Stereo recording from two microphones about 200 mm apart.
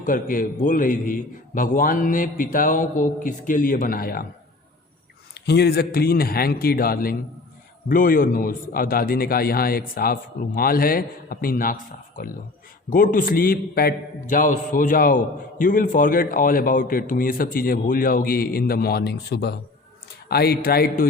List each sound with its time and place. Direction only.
0.0 s a man's voice: 45° left (ahead or behind)
5.3 s a man's voice: 55° left (ahead or behind)